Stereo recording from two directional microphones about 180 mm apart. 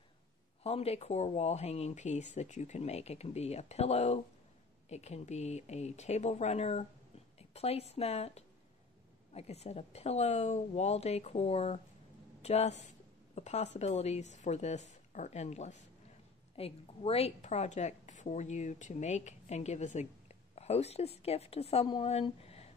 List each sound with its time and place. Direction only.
0.7 s a woman's voice: 35° left (ahead or behind)